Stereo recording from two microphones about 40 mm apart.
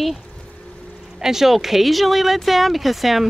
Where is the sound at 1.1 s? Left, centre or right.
Centre.